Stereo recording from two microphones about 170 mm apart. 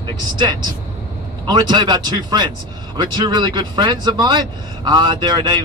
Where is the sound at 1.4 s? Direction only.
25° right (ahead or behind).